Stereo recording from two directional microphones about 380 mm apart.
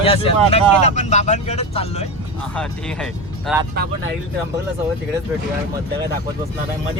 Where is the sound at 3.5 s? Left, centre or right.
Centre.